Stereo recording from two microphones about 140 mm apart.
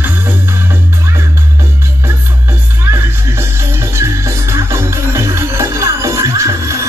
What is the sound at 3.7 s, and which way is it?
Music, 20° right (ahead or behind).